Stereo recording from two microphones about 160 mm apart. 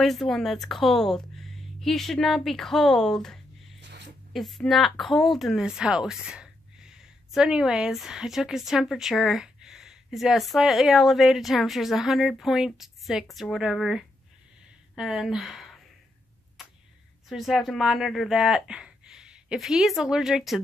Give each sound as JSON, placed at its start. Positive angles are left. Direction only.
{"t": 0.0, "sound": "speech", "side_deg": 0}
{"t": 3.8, "sound": "a sound", "side_deg": -90}
{"t": 4.3, "sound": "speech", "side_deg": 0}
{"t": 17.3, "sound": "speech", "side_deg": 0}